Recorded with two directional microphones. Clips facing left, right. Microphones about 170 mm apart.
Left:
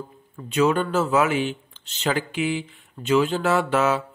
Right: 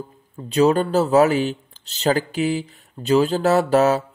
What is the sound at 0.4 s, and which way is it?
Speech, 35° right (ahead or behind).